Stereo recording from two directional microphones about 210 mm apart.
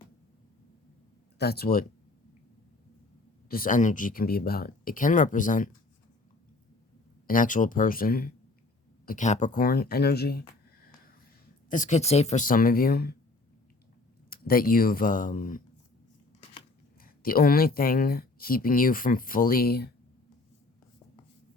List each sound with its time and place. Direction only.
1.4 s speech: 50° left (ahead or behind)
3.5 s speech: 40° left (ahead or behind)
7.3 s speech: 40° left (ahead or behind)
11.7 s speech: 35° left (ahead or behind)
14.3 s speech: 45° left (ahead or behind)
17.0 s speech: 45° left (ahead or behind)